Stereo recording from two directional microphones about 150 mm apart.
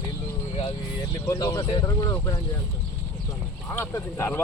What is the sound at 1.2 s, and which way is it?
Speech, 20° left (ahead or behind).